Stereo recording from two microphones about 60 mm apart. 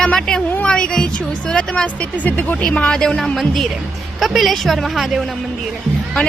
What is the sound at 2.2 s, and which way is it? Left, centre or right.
Speech, left.